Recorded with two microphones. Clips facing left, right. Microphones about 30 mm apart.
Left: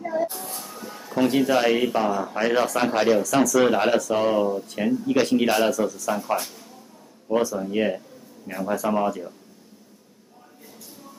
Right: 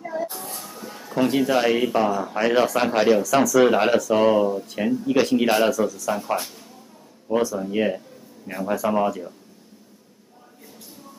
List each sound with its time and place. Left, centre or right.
0.3 s music: centre
0.9 s speech: centre